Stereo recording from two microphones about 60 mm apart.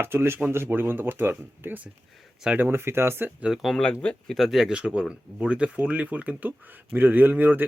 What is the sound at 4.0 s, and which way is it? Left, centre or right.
Speech, centre.